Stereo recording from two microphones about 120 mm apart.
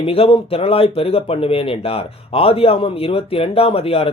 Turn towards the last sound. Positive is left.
turn(degrees=55)  # may be behind; listen again after turning